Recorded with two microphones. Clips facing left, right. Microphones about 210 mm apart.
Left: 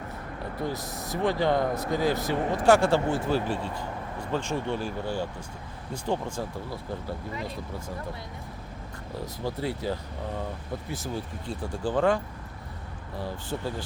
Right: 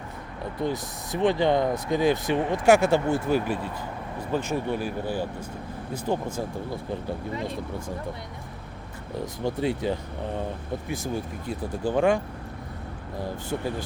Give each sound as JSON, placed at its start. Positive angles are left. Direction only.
{"t": 1.1, "sound": "speech", "side_deg": -20}
{"t": 4.5, "sound": "speech", "side_deg": -15}
{"t": 9.4, "sound": "speech", "side_deg": -20}
{"t": 13.2, "sound": "speech", "side_deg": -10}